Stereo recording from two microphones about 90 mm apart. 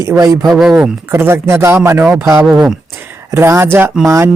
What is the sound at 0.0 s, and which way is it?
Speech, 35° right (ahead or behind).